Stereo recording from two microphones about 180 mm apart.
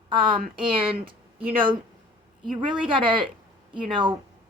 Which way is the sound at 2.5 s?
25° right (ahead or behind).